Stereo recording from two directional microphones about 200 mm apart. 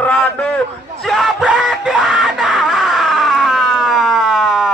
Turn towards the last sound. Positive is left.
turn(degrees=0)  # may be behind; listen again after turning